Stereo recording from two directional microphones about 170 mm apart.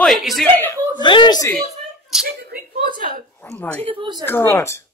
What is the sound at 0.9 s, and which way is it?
Speech, 25° left (ahead or behind).